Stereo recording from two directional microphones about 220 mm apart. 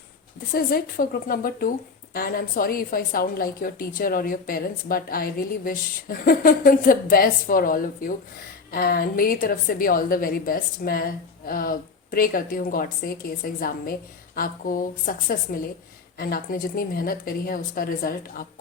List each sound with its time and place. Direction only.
0.5 s a woman's voice: 40° left (ahead or behind)